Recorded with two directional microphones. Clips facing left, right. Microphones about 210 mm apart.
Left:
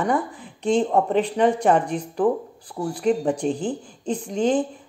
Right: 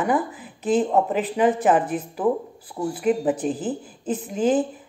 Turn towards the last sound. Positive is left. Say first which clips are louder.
# even
turn(degrees=-5)  # may be behind; listen again after turning